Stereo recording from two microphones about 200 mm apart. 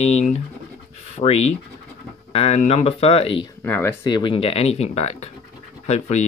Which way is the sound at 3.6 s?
10° left (ahead or behind).